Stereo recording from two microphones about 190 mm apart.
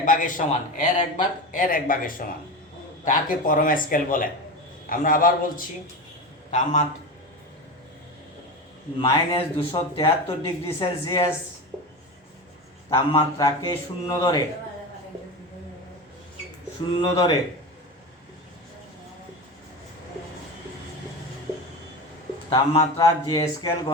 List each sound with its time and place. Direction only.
0.0 s a man's voice: 45° left (ahead or behind)
9.0 s speech: 25° left (ahead or behind)
12.9 s speech: 25° left (ahead or behind)
17.0 s speech: 25° left (ahead or behind)
22.4 s speech: 30° left (ahead or behind)